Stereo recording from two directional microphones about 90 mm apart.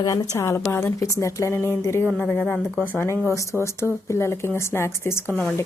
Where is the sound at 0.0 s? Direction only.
35° left (ahead or behind).